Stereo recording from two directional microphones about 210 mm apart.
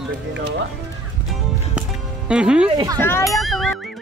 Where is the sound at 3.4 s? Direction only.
Centre (ahead or behind).